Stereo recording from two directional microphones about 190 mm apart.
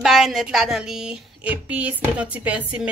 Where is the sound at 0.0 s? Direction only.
Centre (ahead or behind).